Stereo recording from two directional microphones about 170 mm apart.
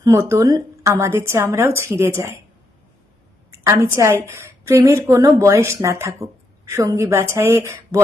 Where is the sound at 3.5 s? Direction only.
15° right (ahead or behind).